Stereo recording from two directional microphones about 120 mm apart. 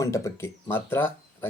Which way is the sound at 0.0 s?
25° left (ahead or behind).